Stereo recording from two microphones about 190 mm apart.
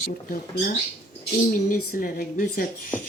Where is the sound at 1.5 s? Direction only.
50° left (ahead or behind).